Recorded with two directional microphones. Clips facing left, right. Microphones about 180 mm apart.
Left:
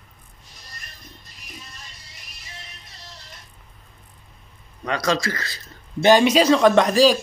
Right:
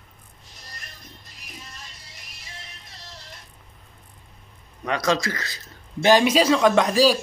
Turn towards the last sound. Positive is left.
turn(degrees=-5)  # may be behind; listen again after turning